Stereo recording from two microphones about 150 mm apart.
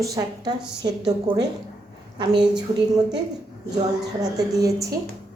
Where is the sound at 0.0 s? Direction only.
25° right (ahead or behind).